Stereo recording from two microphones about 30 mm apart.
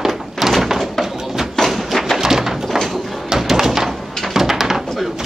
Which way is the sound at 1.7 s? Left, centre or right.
Centre.